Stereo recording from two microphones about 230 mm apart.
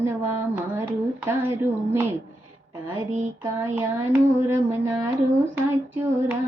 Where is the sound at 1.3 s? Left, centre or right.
Centre.